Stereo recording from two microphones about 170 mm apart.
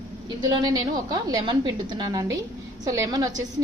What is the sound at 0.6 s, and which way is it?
A woman's voice, 25° right (ahead or behind).